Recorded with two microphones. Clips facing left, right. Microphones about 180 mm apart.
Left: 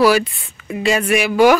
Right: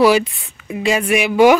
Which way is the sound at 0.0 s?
20° right (ahead or behind).